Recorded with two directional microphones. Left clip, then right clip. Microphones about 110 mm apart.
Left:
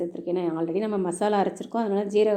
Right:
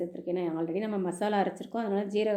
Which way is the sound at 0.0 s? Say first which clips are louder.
Left 5 dB; 35° left (ahead or behind).